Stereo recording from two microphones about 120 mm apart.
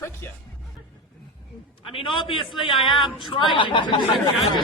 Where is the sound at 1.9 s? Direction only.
45° left (ahead or behind).